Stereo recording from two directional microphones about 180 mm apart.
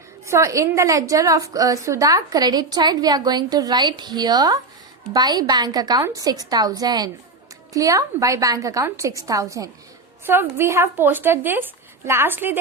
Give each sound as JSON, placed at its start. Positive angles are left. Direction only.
{"t": 0.3, "sound": "a woman's voice", "side_deg": -15}